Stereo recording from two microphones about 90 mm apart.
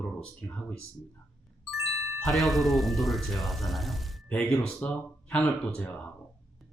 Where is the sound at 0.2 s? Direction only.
10° left (ahead or behind).